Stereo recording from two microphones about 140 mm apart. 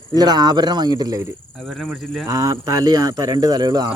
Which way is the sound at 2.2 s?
25° right (ahead or behind).